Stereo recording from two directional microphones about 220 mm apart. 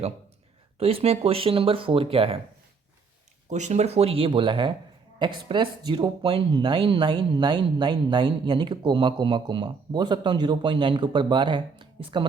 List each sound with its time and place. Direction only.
0.8 s speech: 25° right (ahead or behind)
3.5 s speech: 30° right (ahead or behind)